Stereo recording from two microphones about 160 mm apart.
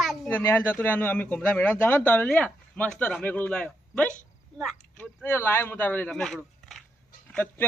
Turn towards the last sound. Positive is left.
turn(degrees=10)  # may be behind; listen again after turning